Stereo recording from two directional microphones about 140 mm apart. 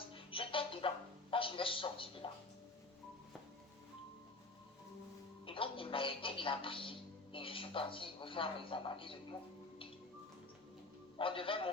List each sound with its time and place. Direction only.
0.1 s music: 40° left (ahead or behind)
5.5 s music: 40° left (ahead or behind)
11.2 s a man's voice: 40° left (ahead or behind)